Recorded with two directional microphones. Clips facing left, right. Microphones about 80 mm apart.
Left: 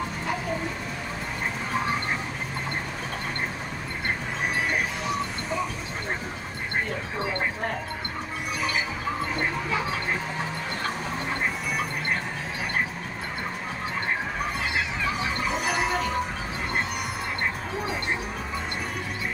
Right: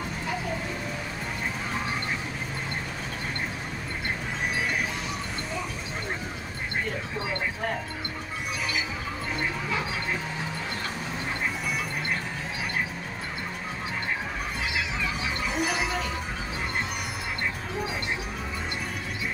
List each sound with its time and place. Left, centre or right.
15.7 s music: left